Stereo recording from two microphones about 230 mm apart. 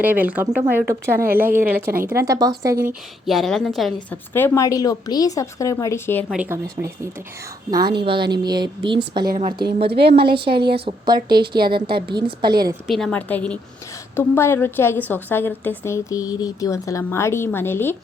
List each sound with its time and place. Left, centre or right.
0.0 s a woman's voice: centre
2.8 s a woman's voice: centre
6.2 s a woman's voice: centre
12.9 s a woman's voice: centre